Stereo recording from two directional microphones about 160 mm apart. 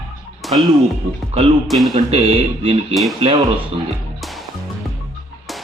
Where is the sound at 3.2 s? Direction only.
30° right (ahead or behind).